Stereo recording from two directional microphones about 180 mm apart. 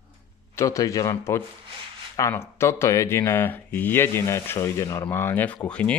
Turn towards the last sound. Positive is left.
turn(degrees=5)  # may be behind; listen again after turning